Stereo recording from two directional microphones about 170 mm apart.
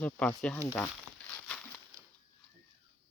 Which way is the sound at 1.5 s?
5° left (ahead or behind).